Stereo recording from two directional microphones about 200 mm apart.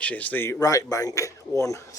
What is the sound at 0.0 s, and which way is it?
Speech, 5° left (ahead or behind).